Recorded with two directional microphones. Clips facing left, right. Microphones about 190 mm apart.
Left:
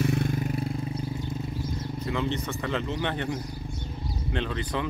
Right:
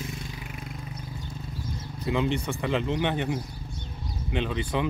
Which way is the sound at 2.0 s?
15° right (ahead or behind).